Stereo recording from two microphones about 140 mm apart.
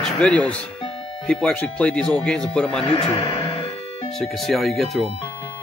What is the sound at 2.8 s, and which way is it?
Music, 45° left (ahead or behind).